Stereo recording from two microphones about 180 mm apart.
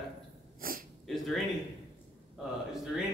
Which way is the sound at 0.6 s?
50° right (ahead or behind).